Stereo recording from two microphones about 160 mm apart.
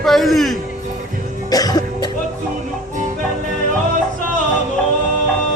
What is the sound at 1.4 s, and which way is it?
Cough, 25° left (ahead or behind).